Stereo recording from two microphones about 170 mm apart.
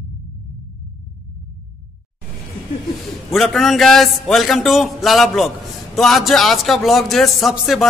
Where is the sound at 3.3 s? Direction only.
Centre (ahead or behind).